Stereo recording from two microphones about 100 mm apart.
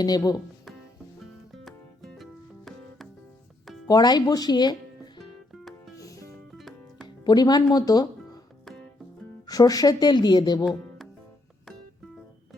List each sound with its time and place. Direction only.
0.0 s speech: 40° left (ahead or behind)
1.6 s music: centre (ahead or behind)
3.8 s speech: 40° left (ahead or behind)
6.0 s music: 35° left (ahead or behind)
6.3 s music: centre (ahead or behind)
7.3 s speech: 45° left (ahead or behind)
9.5 s a woman's voice: 35° left (ahead or behind)
10.7 s music: centre (ahead or behind)